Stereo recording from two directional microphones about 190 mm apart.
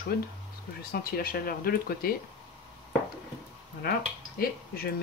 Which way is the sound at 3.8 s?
50° left (ahead or behind).